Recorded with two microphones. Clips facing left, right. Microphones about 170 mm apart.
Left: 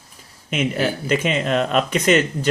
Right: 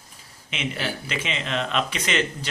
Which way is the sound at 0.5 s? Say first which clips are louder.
Left 8 dB; 50° left (ahead or behind).